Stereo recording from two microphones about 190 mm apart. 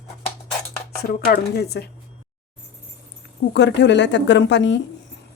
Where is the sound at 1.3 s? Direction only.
60° left (ahead or behind).